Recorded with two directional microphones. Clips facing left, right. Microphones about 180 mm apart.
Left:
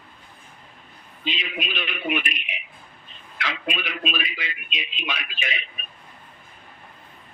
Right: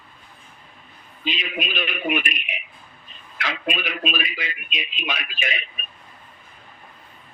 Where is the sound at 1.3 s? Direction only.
50° right (ahead or behind).